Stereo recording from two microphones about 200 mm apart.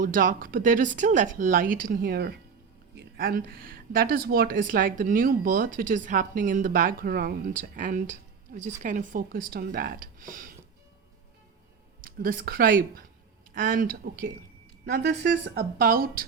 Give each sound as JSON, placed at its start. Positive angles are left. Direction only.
{"t": 0.0, "sound": "speech", "side_deg": -40}
{"t": 12.0, "sound": "speech", "side_deg": -45}